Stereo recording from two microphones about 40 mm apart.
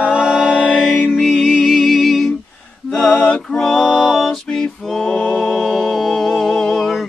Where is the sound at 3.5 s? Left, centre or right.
Centre.